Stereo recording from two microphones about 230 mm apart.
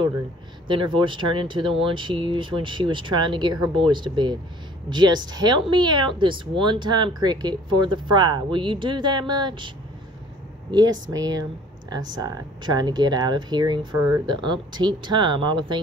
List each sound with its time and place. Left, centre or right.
0.7 s speech: right
10.7 s speech: centre